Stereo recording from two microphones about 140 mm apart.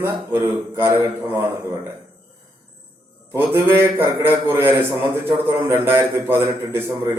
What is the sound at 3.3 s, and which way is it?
A man's voice, 15° right (ahead or behind).